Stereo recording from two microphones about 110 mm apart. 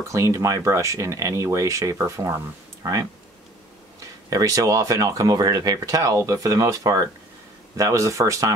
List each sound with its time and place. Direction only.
0.0 s speech: 30° right (ahead or behind)
4.3 s speech: 35° right (ahead or behind)